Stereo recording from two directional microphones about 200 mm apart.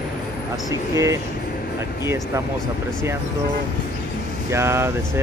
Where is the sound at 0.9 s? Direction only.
15° right (ahead or behind).